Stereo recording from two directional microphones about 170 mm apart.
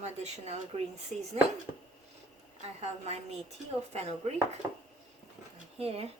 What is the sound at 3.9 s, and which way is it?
Speech, 40° right (ahead or behind).